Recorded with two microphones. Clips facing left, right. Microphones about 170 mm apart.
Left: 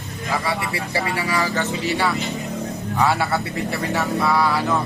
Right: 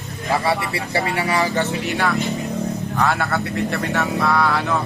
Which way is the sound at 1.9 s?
Centre (ahead or behind).